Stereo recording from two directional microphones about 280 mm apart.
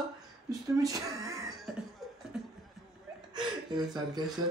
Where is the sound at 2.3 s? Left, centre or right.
Centre.